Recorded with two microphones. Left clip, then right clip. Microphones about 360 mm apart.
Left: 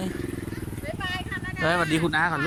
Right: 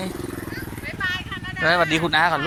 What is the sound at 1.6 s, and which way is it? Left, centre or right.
Speech, centre.